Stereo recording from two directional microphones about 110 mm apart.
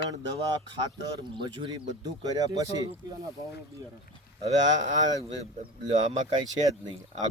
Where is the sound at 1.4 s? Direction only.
40° right (ahead or behind).